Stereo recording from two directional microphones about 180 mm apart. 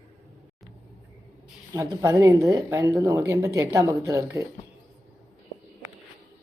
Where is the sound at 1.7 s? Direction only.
20° right (ahead or behind).